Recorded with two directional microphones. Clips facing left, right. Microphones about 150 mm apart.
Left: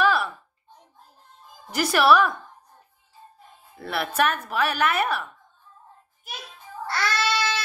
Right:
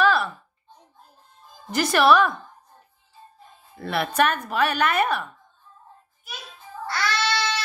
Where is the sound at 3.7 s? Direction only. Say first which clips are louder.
Right 2 dB; 5° left (ahead or behind).